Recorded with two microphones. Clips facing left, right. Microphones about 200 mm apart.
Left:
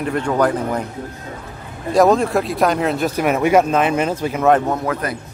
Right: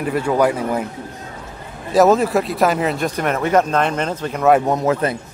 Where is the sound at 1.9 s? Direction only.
5° right (ahead or behind).